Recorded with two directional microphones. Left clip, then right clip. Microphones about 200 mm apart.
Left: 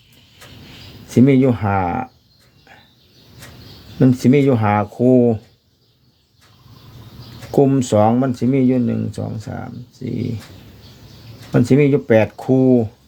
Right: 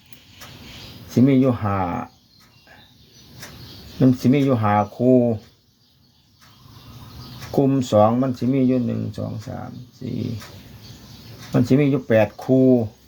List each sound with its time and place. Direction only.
1.1 s speech: 45° left (ahead or behind)
4.0 s speech: 45° left (ahead or behind)
7.5 s speech: 45° left (ahead or behind)
11.5 s speech: 45° left (ahead or behind)